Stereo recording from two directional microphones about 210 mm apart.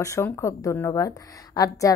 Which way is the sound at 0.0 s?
15° left (ahead or behind).